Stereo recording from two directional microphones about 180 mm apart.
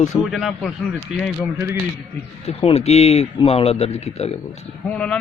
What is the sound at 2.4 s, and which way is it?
Speech, 35° left (ahead or behind).